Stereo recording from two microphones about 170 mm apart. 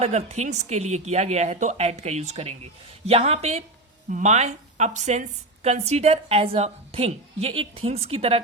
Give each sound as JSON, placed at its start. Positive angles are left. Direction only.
{"t": 0.0, "sound": "a woman's voice", "side_deg": -40}